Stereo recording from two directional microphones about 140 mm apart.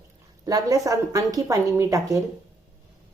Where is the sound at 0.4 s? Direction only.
25° right (ahead or behind).